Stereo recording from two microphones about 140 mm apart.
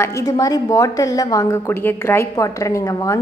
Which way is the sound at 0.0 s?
25° left (ahead or behind).